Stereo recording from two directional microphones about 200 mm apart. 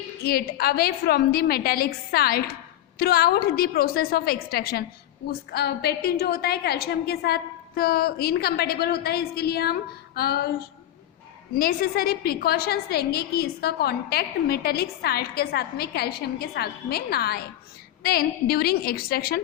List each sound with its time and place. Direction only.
0.2 s a woman's voice: 50° left (ahead or behind)
11.5 s a woman's voice: 45° left (ahead or behind)